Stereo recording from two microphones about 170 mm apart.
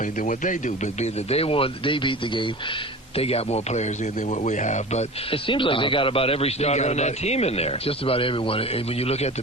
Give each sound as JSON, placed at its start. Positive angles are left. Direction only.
{"t": 0.0, "sound": "a man's voice", "side_deg": 50}